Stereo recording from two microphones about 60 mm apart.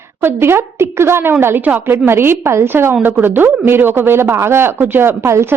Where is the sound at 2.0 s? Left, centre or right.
Right.